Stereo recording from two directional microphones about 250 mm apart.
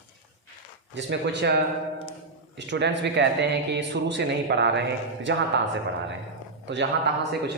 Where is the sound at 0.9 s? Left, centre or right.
Right.